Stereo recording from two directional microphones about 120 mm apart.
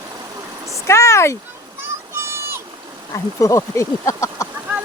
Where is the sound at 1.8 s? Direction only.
20° right (ahead or behind).